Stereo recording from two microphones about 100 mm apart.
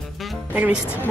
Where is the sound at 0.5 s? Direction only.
15° right (ahead or behind).